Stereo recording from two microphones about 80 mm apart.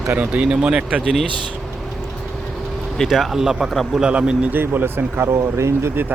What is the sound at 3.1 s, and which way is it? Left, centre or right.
Speech, centre.